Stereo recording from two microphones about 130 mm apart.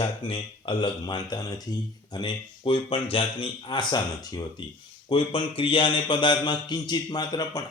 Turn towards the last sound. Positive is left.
turn(degrees=30)  # may be behind; listen again after turning